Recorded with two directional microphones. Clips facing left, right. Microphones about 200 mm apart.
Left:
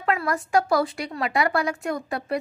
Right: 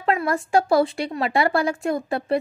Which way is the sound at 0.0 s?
25° right (ahead or behind).